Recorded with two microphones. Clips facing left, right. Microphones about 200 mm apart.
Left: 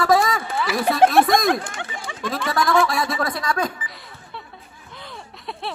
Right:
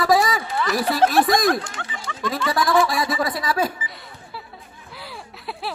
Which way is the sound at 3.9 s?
Centre (ahead or behind).